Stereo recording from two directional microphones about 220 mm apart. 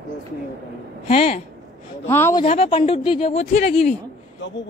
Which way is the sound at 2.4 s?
30° left (ahead or behind).